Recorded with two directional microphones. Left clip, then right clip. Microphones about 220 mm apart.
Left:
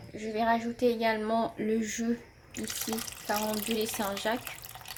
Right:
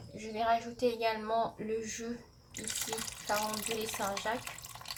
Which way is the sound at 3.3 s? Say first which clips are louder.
Left 3 dB; 50° left (ahead or behind).